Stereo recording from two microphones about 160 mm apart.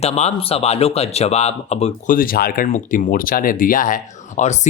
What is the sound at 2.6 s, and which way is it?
Speech, 50° left (ahead or behind).